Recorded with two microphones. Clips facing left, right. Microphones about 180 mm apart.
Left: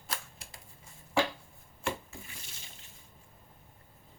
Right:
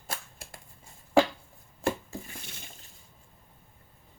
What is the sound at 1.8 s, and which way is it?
Rub, 40° right (ahead or behind).